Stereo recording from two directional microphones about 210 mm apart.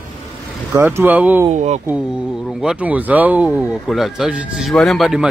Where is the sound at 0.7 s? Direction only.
10° right (ahead or behind).